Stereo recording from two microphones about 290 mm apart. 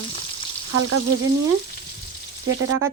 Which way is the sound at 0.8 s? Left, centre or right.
Right.